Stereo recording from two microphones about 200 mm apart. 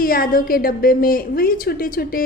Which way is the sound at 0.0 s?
45° left (ahead or behind).